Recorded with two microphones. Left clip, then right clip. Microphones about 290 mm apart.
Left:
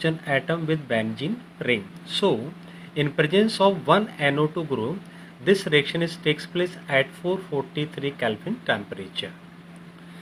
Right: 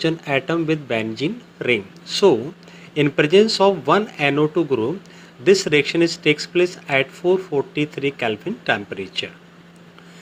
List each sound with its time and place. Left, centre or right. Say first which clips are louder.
0.0 s speech: right 4 dB; centre